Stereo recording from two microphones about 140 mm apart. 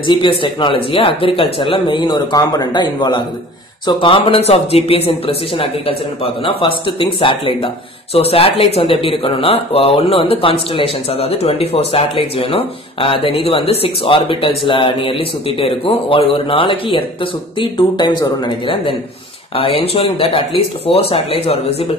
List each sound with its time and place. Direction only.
0.0 s speech: 35° left (ahead or behind)
19.5 s speech: 40° left (ahead or behind)